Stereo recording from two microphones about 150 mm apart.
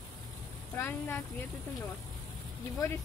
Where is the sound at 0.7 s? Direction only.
15° left (ahead or behind).